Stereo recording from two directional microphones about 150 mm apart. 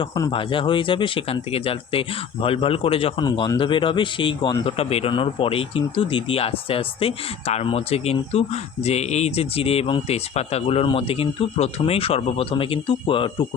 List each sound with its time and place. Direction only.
0.0 s speech: 30° left (ahead or behind)